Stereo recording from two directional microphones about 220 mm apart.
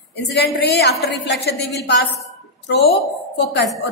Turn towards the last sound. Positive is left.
turn(degrees=50)  # may be behind; listen again after turning